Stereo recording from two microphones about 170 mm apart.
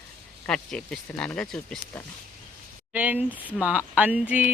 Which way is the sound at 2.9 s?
10° right (ahead or behind).